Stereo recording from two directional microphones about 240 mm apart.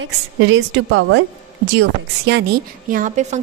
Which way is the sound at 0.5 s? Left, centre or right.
Right.